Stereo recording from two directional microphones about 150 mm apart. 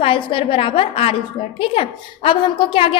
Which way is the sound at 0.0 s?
35° left (ahead or behind).